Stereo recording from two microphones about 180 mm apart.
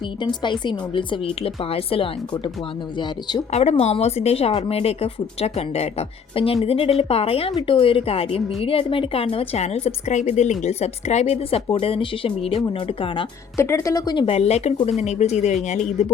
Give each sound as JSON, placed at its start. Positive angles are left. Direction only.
{"t": 0.2, "sound": "a woman's voice", "side_deg": 25}
{"t": 3.5, "sound": "a woman's voice", "side_deg": 35}
{"t": 13.6, "sound": "a woman's voice", "side_deg": 15}